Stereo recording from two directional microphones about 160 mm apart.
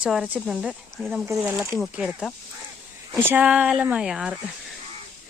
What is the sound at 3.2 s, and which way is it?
Speech, 10° right (ahead or behind).